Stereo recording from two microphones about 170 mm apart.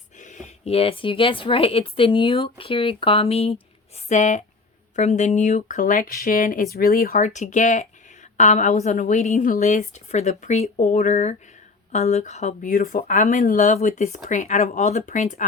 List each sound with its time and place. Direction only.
0.2 s speech: 45° left (ahead or behind)
12.7 s speech: 55° left (ahead or behind)